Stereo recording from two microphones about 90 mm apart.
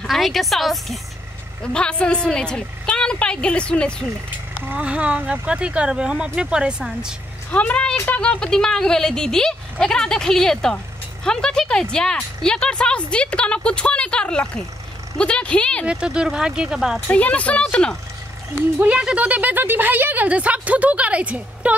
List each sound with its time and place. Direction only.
0.0 s a woman's voice: centre (ahead or behind)
4.6 s a woman's voice: 15° right (ahead or behind)
7.5 s speech: 10° left (ahead or behind)
15.8 s a woman's voice: 10° right (ahead or behind)
17.1 s speech: 15° left (ahead or behind)
18.8 s a woman's voice: 15° right (ahead or behind)